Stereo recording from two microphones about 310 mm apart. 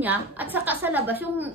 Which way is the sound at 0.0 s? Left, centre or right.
Centre.